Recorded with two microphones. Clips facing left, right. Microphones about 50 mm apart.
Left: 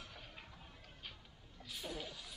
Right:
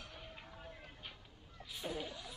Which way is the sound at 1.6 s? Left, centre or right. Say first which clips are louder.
Right 3 dB; centre.